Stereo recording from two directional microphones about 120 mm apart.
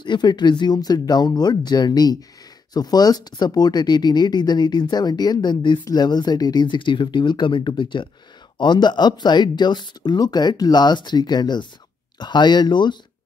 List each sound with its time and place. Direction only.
0.0 s speech: 40° left (ahead or behind)